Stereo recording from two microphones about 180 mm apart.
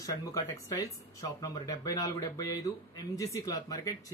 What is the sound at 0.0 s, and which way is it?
Speech, 20° left (ahead or behind).